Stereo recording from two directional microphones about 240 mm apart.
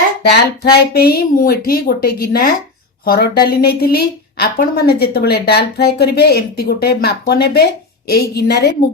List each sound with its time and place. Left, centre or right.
0.2 s a woman's voice: left